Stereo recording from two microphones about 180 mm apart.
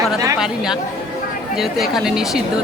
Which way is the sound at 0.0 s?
20° right (ahead or behind).